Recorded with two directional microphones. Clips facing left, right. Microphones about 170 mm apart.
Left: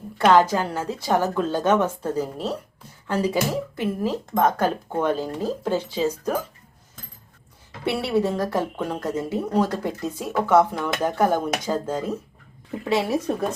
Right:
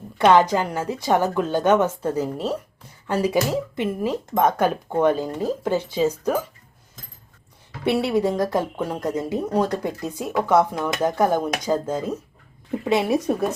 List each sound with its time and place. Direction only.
0.3 s a woman's voice: 20° right (ahead or behind)
7.9 s a woman's voice: 15° right (ahead or behind)